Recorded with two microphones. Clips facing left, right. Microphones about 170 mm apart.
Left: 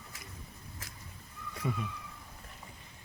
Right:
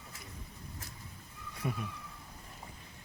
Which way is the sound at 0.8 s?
90° left.